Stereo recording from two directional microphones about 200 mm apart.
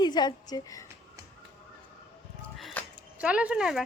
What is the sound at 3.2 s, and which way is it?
Speech, 5° right (ahead or behind).